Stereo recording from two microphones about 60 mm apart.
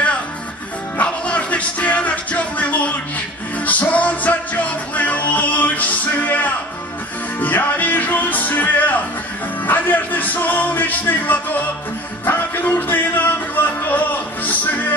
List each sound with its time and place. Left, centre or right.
0.9 s music: left